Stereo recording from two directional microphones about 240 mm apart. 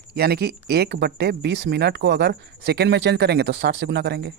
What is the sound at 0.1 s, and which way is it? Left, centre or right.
Speech, right.